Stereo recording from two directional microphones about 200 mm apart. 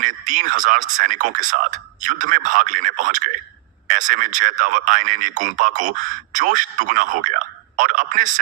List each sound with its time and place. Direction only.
0.0 s speech: 40° right (ahead or behind)